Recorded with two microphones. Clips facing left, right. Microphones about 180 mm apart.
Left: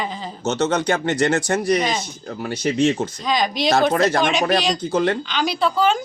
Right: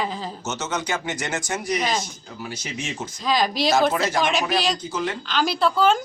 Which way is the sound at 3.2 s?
5° right (ahead or behind).